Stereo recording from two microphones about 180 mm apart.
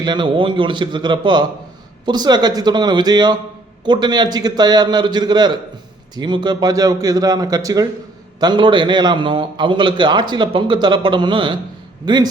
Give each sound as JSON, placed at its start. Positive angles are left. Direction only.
{"t": 0.0, "sound": "a man's voice", "side_deg": -25}